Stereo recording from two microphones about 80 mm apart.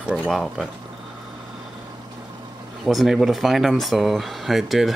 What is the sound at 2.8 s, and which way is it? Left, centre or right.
Speech, centre.